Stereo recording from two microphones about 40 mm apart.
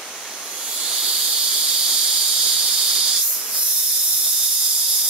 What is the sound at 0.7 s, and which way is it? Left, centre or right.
Owl, right.